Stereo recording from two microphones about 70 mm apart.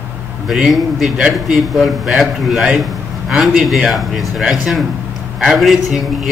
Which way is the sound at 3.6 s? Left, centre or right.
Centre.